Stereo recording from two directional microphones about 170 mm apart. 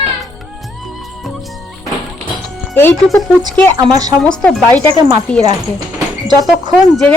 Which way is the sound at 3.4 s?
20° right (ahead or behind).